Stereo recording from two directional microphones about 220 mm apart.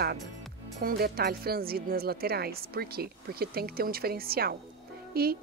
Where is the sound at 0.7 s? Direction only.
45° right (ahead or behind).